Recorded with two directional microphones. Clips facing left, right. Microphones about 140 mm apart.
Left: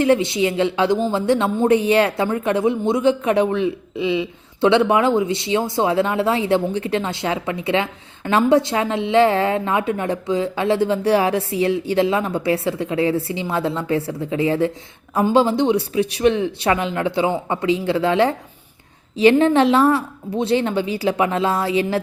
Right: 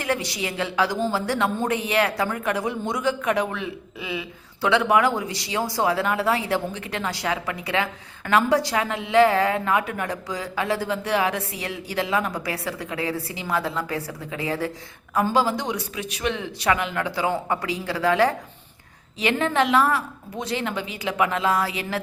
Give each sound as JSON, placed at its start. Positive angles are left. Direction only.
{"t": 0.0, "sound": "a woman's voice", "side_deg": 25}